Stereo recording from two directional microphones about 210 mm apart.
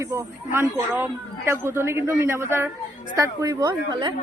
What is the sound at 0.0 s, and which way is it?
A man's voice, 15° right (ahead or behind).